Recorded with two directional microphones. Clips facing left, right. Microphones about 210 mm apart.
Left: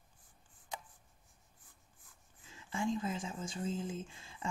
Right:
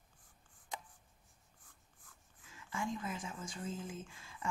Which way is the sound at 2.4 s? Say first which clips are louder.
Left 4 dB; 25° left (ahead or behind).